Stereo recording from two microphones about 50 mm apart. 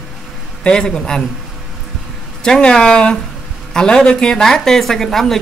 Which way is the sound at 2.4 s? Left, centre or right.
Centre.